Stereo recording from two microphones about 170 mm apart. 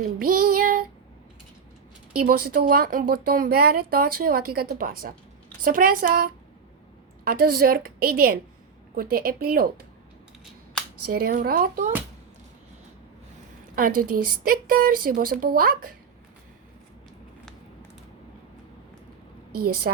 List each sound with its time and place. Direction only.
0.2 s child singing: 60° right (ahead or behind)
2.1 s speech: 60° right (ahead or behind)
11.1 s speech: 60° right (ahead or behind)
13.7 s speech: 55° right (ahead or behind)